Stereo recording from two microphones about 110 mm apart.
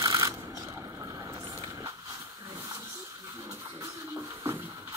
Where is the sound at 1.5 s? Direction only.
30° right (ahead or behind).